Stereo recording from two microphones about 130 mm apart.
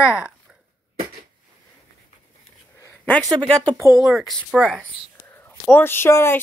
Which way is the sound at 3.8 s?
25° right (ahead or behind).